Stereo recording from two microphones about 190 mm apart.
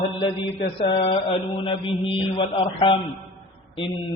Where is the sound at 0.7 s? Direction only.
30° left (ahead or behind).